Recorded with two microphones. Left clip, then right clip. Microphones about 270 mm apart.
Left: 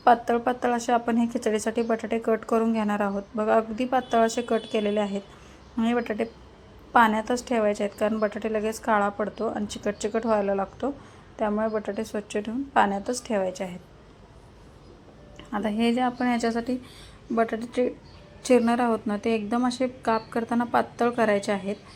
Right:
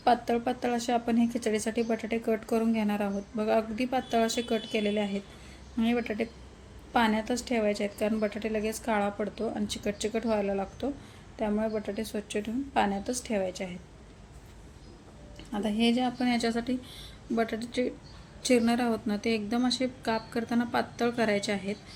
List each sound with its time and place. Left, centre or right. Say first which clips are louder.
0.0 s a woman's voice: left 6 dB; centre
15.5 s a woman's voice: left 3 dB; centre